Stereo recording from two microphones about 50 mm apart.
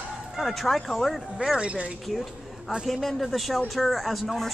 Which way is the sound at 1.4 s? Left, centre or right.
Centre.